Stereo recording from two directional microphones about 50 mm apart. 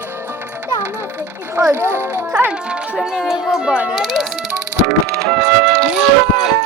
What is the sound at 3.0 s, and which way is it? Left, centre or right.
Speech, centre.